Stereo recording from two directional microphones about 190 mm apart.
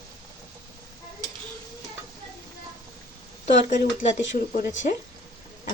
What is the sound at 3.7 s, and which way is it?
Speech, 40° left (ahead or behind).